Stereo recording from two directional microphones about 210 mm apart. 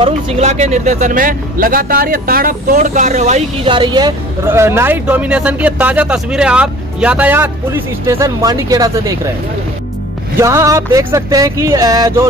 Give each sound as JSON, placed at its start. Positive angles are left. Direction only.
{"t": 0.0, "sound": "speech", "side_deg": -35}
{"t": 10.4, "sound": "speech", "side_deg": -15}